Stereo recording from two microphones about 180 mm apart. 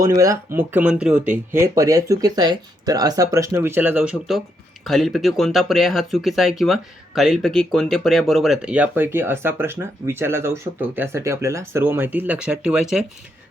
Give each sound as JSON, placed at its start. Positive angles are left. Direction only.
{"t": 0.0, "sound": "speech", "side_deg": -15}
{"t": 1.5, "sound": "speech", "side_deg": -15}